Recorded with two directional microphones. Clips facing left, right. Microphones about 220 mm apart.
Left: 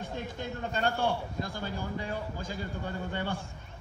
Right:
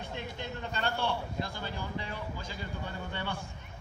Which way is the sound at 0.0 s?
45° left (ahead or behind).